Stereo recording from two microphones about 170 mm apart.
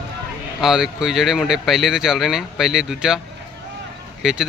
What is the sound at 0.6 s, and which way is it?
Speech, centre (ahead or behind).